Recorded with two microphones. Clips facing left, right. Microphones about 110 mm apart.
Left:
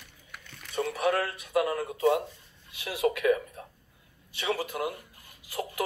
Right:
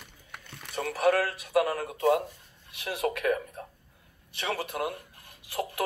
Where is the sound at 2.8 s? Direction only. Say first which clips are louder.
Left 2 dB; 50° right (ahead or behind).